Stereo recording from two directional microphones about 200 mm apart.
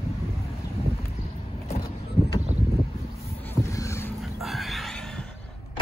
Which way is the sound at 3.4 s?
15° left (ahead or behind).